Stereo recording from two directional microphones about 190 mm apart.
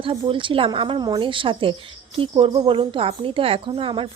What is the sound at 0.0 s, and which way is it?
A woman's voice, 25° right (ahead or behind).